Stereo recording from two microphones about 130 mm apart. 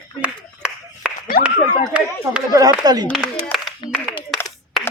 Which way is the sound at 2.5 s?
30° right (ahead or behind).